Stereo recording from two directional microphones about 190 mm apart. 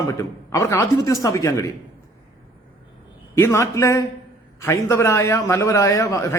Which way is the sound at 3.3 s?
15° left (ahead or behind).